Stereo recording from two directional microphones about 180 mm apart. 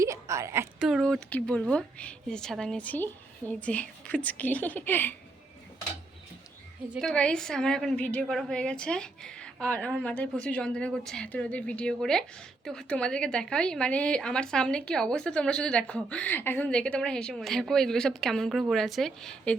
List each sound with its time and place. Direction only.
0.0 s a sound: 15° right (ahead or behind)
0.8 s speech: centre (ahead or behind)
6.9 s a woman's voice: centre (ahead or behind)